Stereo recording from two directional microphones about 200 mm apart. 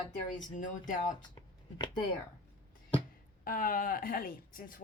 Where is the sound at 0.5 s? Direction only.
40° left (ahead or behind).